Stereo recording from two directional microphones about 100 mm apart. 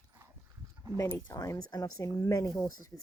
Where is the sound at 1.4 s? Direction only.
35° left (ahead or behind).